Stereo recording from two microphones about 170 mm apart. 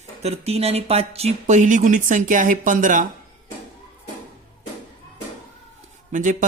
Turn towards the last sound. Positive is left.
turn(degrees=-50)  # may be behind; listen again after turning